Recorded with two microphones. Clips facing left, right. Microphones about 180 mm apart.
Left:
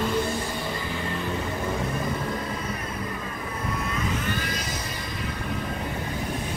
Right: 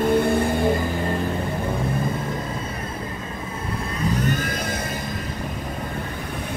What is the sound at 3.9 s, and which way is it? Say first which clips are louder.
Vehicle: right 9 dB; 35° right (ahead or behind).